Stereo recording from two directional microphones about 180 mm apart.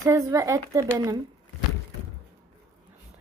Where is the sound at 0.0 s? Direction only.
20° right (ahead or behind).